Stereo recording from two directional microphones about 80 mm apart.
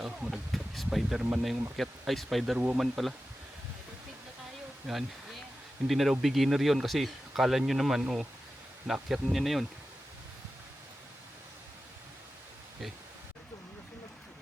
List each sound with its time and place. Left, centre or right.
0.0 s speech: centre
0.5 s speech: centre
1.2 s speech: centre
1.7 s speech: centre
4.9 s speech: centre